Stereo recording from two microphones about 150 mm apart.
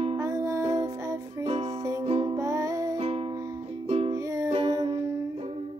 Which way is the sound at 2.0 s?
40° right (ahead or behind).